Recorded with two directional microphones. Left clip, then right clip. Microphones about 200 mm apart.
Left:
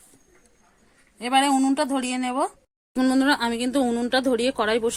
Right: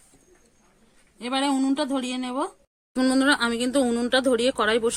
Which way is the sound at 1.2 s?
35° left (ahead or behind).